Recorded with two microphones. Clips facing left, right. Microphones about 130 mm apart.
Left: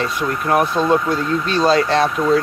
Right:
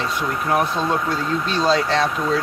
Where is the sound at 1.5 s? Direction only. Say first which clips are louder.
Left 4 dB; 55° left (ahead or behind).